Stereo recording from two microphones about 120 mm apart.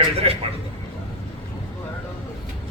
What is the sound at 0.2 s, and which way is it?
Speech, 50° right (ahead or behind).